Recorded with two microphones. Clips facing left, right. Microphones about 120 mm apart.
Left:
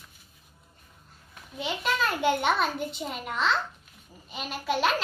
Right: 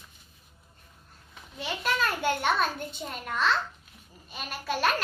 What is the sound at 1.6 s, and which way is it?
A child's voice, 15° left (ahead or behind).